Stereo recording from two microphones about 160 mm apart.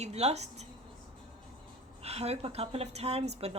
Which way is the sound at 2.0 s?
40° right (ahead or behind).